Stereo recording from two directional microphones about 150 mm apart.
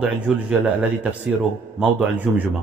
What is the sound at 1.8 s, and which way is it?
Speech, 10° right (ahead or behind).